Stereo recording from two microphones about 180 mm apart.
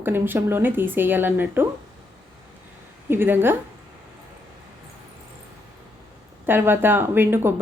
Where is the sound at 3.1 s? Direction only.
10° right (ahead or behind).